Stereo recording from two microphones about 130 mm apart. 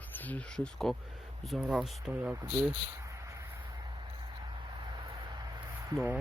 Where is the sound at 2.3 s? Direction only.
20° right (ahead or behind).